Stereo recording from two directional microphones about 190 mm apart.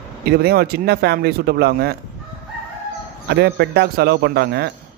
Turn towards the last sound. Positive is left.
turn(degrees=-55)  # may be behind; listen again after turning